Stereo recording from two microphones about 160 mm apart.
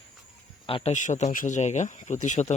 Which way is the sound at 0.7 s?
40° left (ahead or behind).